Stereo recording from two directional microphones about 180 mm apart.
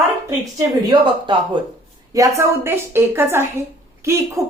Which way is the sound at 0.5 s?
25° right (ahead or behind).